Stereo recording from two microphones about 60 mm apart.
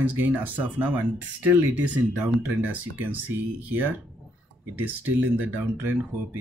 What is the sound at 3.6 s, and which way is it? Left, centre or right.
Speech, right.